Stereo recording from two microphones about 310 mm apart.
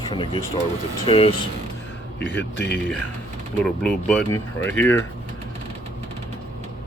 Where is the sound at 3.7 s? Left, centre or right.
Centre.